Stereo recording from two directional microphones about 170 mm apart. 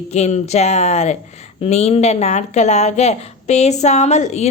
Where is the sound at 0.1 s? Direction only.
40° left (ahead or behind).